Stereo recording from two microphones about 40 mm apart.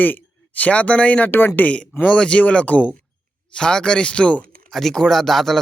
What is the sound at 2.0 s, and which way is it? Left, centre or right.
Speech, left.